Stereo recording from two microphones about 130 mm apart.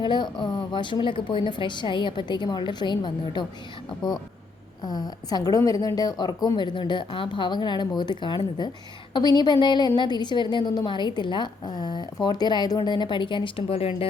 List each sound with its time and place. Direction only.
0.0 s a woman's voice: 35° left (ahead or behind)
4.8 s a woman's voice: 30° left (ahead or behind); by 14.1 s 50° left (ahead or behind)